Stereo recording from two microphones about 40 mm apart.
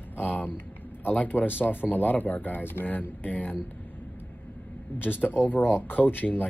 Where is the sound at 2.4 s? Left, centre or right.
Left.